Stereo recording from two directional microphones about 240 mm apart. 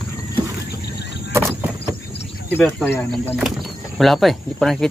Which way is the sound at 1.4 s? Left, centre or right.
Centre.